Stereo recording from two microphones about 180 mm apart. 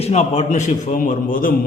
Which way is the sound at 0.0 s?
40° left (ahead or behind).